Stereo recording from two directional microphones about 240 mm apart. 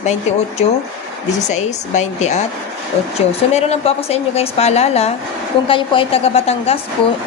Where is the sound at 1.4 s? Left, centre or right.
Left.